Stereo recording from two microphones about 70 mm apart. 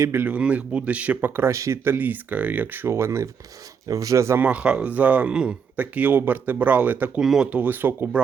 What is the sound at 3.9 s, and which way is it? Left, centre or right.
Speech, right.